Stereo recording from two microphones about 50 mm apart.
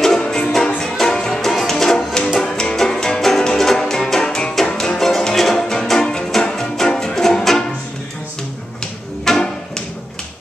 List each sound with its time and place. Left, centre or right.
0.2 s music: centre
9.2 s music: centre